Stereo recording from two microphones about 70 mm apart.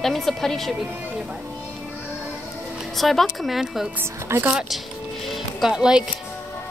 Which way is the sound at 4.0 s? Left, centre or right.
Right.